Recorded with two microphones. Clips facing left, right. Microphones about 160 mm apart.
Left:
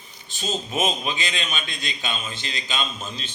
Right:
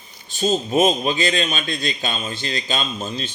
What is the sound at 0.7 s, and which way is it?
Speech, 35° right (ahead or behind).